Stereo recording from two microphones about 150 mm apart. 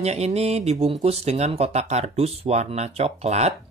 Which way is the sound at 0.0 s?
45° right (ahead or behind).